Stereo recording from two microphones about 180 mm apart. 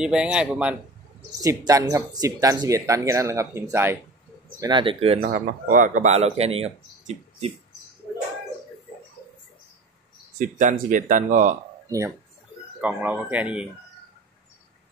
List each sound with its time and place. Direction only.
0.0 s speech: 5° right (ahead or behind)
1.4 s speech: 20° right (ahead or behind)
4.6 s speech: 25° right (ahead or behind)
5.3 s speech: 45° right (ahead or behind)
10.6 s speech: 45° right (ahead or behind)
12.8 s speech: 10° right (ahead or behind)